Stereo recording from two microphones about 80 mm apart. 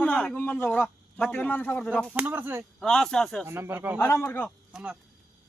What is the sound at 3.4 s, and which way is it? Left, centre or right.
Speech, right.